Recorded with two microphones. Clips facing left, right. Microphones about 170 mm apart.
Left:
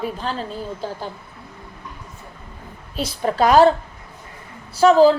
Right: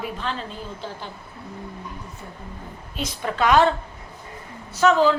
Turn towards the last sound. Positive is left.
turn(degrees=35)  # may be behind; listen again after turning